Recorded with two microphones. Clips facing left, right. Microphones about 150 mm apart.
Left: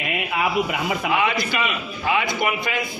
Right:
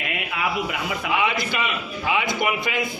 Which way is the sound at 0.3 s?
25° left (ahead or behind).